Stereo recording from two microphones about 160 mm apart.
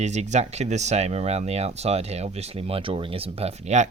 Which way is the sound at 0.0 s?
45° right (ahead or behind).